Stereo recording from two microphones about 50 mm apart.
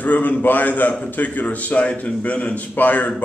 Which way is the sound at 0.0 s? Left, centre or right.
Left.